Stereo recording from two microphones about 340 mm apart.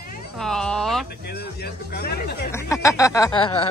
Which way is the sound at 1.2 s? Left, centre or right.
Left.